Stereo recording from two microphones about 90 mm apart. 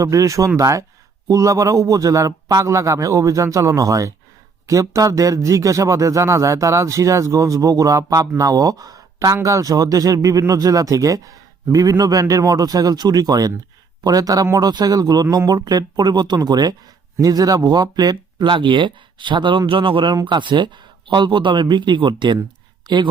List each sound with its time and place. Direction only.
0.0 s a man's voice: 35° right (ahead or behind); by 20.1 s 75° right (ahead or behind)
20.2 s speech: 60° right (ahead or behind)